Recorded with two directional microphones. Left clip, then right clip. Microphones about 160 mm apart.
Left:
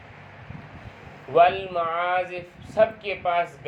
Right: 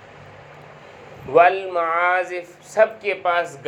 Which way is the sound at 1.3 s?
30° right (ahead or behind).